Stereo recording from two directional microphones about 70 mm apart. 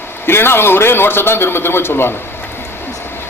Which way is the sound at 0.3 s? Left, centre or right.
Left.